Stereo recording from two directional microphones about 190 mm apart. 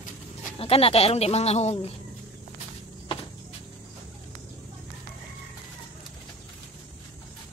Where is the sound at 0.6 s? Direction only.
30° left (ahead or behind).